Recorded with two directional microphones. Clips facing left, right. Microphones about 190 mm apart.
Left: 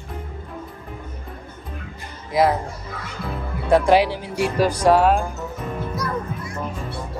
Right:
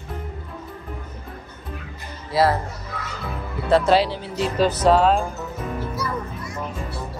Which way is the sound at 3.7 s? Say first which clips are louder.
Left 2 dB; 15° left (ahead or behind).